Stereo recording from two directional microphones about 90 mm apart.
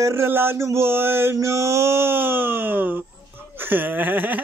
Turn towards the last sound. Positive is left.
turn(degrees=-20)  # may be behind; listen again after turning